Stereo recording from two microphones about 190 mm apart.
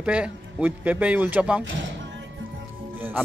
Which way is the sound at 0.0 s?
5° right (ahead or behind).